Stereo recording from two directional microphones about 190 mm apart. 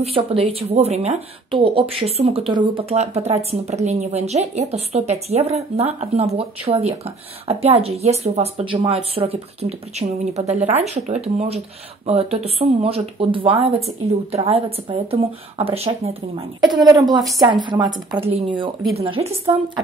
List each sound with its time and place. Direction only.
0.0 s a woman's voice: 30° right (ahead or behind)